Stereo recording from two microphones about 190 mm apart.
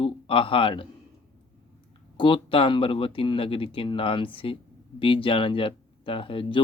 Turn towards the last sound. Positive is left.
turn(degrees=25)  # may be behind; listen again after turning